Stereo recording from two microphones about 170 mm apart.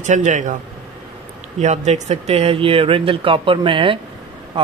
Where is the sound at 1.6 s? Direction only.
45° right (ahead or behind).